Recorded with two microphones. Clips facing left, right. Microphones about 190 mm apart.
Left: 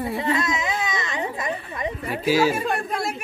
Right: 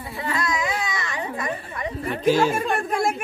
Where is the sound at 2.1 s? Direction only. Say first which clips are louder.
Right 1 dB; 5° left (ahead or behind).